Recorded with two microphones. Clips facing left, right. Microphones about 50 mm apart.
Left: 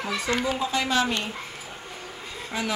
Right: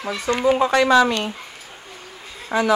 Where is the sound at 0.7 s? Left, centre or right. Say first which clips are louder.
Right 9 dB; right.